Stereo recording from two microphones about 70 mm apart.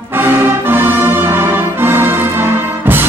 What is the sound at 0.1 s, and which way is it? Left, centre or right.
Music, right.